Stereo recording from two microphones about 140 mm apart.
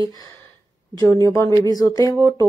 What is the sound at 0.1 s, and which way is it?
Speech, 25° left (ahead or behind).